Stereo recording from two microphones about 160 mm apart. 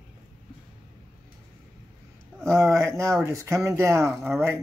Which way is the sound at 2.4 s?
20° right (ahead or behind).